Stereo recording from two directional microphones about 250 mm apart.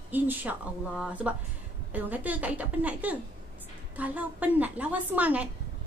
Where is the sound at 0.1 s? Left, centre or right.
Centre.